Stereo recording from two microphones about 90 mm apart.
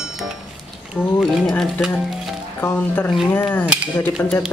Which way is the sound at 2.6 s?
20° left (ahead or behind).